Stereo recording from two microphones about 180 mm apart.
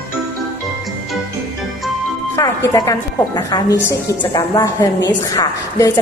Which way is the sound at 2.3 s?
15° left (ahead or behind).